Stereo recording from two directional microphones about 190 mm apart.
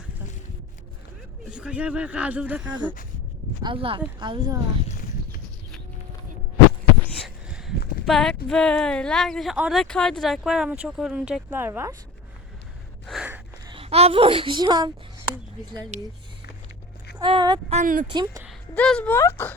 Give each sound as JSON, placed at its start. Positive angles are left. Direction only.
{"t": 1.5, "sound": "speech", "side_deg": -5}
{"t": 3.6, "sound": "speech", "side_deg": -25}
{"t": 7.2, "sound": "a sound", "side_deg": 0}
{"t": 8.0, "sound": "speech", "side_deg": 0}
{"t": 13.1, "sound": "a sound", "side_deg": -5}
{"t": 13.7, "sound": "a woman's voice", "side_deg": -30}
{"t": 17.2, "sound": "speech", "side_deg": -25}
{"t": 17.7, "sound": "speech", "side_deg": -45}
{"t": 18.7, "sound": "speech", "side_deg": 5}